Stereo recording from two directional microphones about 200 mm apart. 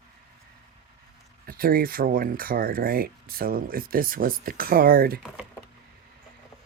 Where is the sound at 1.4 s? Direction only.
45° right (ahead or behind).